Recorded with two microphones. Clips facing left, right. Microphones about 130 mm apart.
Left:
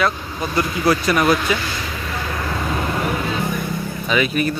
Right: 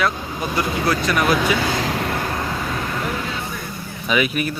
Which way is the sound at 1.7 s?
80° right.